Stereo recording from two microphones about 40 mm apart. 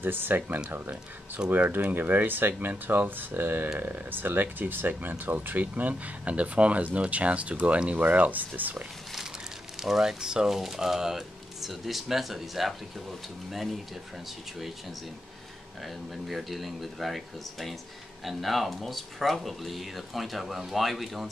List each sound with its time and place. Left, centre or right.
0.0 s speech: right
8.0 s speech: right
9.8 s speech: centre
16.3 s speech: centre